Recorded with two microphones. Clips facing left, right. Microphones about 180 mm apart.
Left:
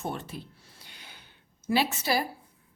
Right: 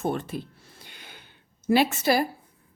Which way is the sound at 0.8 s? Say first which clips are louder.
Right 4 dB; 55° right (ahead or behind).